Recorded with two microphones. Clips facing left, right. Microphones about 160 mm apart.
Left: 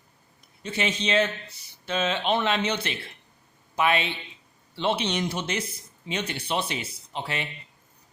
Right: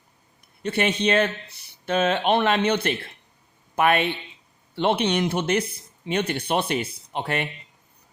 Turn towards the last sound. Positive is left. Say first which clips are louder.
# right 5 dB
turn(degrees=-55)  # may be behind; listen again after turning